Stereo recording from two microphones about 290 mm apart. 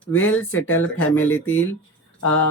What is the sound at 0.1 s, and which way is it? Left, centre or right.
Speech, left.